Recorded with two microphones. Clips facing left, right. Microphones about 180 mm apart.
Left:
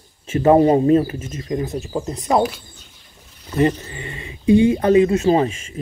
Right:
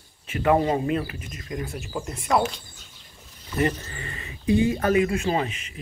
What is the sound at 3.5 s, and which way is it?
Speech, 20° left (ahead or behind).